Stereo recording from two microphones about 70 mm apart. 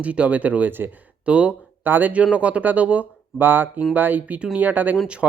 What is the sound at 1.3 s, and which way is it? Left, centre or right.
Speech, centre.